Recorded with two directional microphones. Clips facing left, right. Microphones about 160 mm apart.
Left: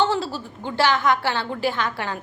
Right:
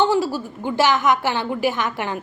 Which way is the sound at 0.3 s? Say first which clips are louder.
Right 3 dB; 15° right (ahead or behind).